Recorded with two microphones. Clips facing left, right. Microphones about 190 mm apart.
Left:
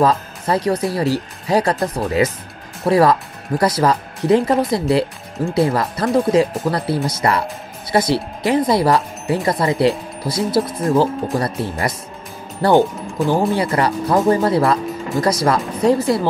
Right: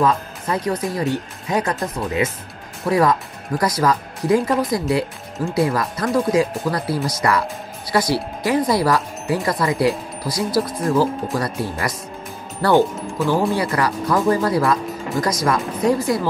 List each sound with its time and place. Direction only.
0.0 s speech: 35° left (ahead or behind)